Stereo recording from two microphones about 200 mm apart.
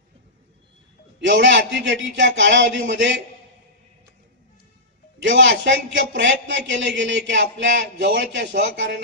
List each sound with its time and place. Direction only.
1.2 s a man's voice: 65° right (ahead or behind)
5.2 s a man's voice: 70° right (ahead or behind)